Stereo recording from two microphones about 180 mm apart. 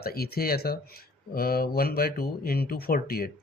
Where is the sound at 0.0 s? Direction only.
60° left (ahead or behind).